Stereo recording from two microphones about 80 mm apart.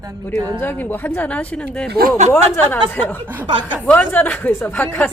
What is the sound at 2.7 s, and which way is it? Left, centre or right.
Speech, left.